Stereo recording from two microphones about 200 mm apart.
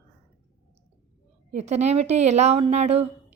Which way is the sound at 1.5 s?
35° right (ahead or behind).